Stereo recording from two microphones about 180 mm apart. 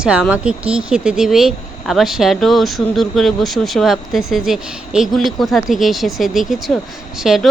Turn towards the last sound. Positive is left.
turn(degrees=0)  # may be behind; listen again after turning